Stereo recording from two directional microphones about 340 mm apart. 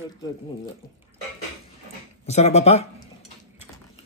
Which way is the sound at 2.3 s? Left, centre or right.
Centre.